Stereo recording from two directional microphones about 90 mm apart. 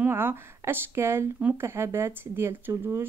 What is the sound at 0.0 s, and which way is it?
Speech, 25° right (ahead or behind).